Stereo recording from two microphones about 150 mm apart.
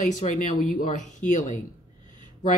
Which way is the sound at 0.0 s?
55° left (ahead or behind).